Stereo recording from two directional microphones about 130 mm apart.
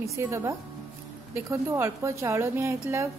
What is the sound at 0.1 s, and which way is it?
A woman's voice, 20° right (ahead or behind).